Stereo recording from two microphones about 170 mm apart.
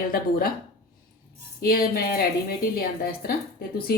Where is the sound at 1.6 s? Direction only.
65° left (ahead or behind).